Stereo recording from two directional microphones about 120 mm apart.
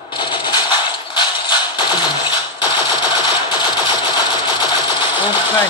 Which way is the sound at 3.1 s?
40° left (ahead or behind).